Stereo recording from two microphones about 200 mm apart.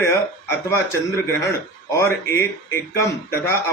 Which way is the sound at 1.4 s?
15° left (ahead or behind).